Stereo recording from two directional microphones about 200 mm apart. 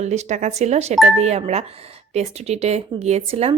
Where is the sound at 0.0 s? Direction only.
35° right (ahead or behind).